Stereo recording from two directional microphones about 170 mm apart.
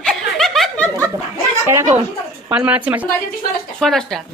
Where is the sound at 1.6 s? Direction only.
15° right (ahead or behind).